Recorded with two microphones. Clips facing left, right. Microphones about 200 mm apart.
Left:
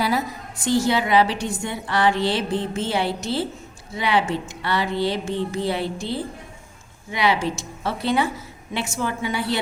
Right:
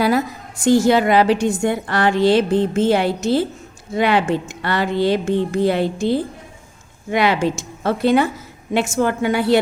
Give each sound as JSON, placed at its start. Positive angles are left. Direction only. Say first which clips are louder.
{"t": 0.0, "sound": "a woman's voice", "louder": "right 6 dB", "side_deg": -50}